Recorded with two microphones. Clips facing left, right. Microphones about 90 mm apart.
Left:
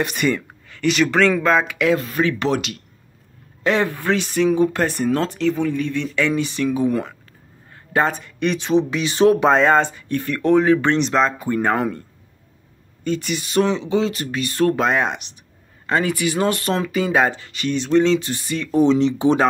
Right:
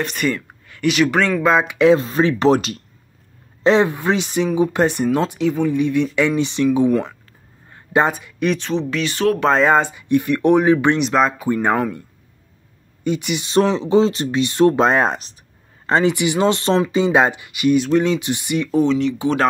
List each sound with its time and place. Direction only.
0.0 s speech: 5° left (ahead or behind)
0.7 s speech: 10° right (ahead or behind)
1.8 s speech: 30° right (ahead or behind)
3.6 s speech: 20° right (ahead or behind)
6.9 s speech: centre (ahead or behind)
7.7 s speech: 20° right (ahead or behind)
8.5 s speech: 10° left (ahead or behind)
9.5 s speech: 5° right (ahead or behind)
13.0 s speech: 15° right (ahead or behind)
13.5 s speech: 35° right (ahead or behind)
15.9 s speech: 25° right (ahead or behind)
18.9 s speech: 25° left (ahead or behind)